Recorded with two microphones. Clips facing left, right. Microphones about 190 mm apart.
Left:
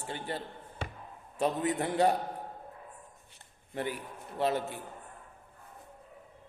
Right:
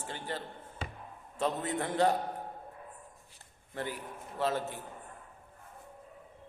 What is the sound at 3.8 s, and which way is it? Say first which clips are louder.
Music: left 3 dB; 15° left (ahead or behind).